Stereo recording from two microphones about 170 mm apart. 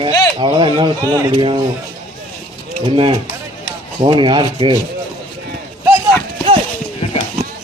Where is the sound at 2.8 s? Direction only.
30° right (ahead or behind).